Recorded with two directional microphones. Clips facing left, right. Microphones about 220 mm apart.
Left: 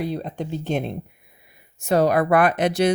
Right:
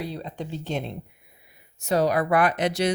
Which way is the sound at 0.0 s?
50° left (ahead or behind).